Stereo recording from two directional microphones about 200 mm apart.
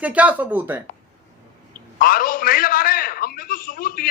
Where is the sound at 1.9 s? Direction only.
45° left (ahead or behind).